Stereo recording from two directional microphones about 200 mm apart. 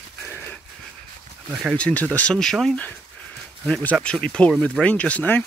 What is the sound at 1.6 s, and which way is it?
Speech, 5° left (ahead or behind).